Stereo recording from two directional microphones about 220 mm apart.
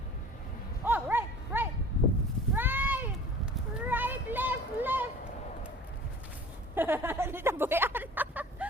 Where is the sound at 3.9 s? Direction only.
10° right (ahead or behind).